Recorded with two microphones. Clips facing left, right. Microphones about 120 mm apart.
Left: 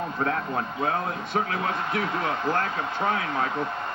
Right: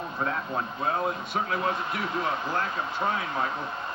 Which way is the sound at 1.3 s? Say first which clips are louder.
Left 5 dB; 55° left (ahead or behind).